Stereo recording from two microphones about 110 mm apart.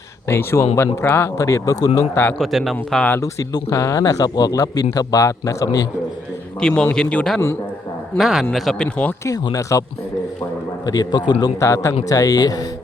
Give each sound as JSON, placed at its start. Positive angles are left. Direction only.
{"t": 0.3, "sound": "speech", "side_deg": 25}
{"t": 2.4, "sound": "a man's voice", "side_deg": 0}
{"t": 2.7, "sound": "a man's voice", "side_deg": 15}
{"t": 3.2, "sound": "speech", "side_deg": 30}
{"t": 6.6, "sound": "a man's voice", "side_deg": 10}
{"t": 8.2, "sound": "a man's voice", "side_deg": -5}
{"t": 9.2, "sound": "speech", "side_deg": 35}
{"t": 10.8, "sound": "speech", "side_deg": 35}
{"t": 11.6, "sound": "speech", "side_deg": 25}